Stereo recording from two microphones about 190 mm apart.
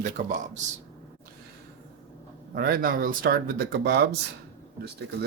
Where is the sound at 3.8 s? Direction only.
60° right (ahead or behind).